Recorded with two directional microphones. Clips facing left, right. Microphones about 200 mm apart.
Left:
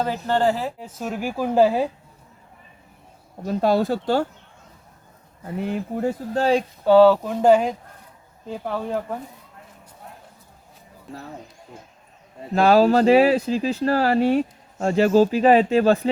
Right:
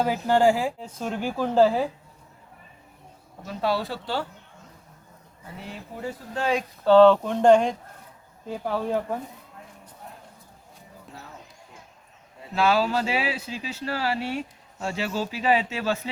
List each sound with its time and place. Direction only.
0.0 s speech: 10° right (ahead or behind)
0.8 s speech: 5° left (ahead or behind)
3.4 s speech: 45° left (ahead or behind)
5.5 s speech: 55° left (ahead or behind); by 6.7 s 35° left (ahead or behind)
6.8 s speech: 10° left (ahead or behind)
12.4 s speech: 45° left (ahead or behind)